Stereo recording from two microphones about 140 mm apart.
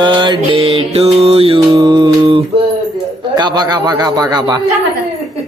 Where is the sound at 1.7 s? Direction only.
30° right (ahead or behind).